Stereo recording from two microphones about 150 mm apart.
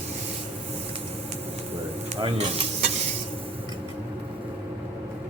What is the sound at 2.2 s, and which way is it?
Speech, 35° right (ahead or behind).